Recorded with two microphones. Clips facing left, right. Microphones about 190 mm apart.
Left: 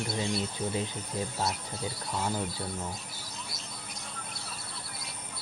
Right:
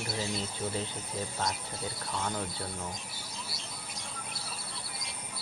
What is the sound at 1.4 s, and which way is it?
Speech, 5° left (ahead or behind).